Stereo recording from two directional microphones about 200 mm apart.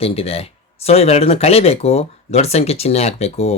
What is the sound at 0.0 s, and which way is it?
Speech, 30° left (ahead or behind).